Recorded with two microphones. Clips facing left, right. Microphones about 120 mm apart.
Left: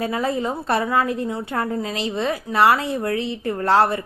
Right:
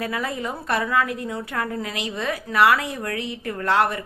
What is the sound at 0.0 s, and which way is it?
A woman's voice, 30° left (ahead or behind).